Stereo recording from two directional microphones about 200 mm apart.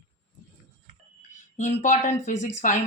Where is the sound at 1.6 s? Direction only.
35° left (ahead or behind).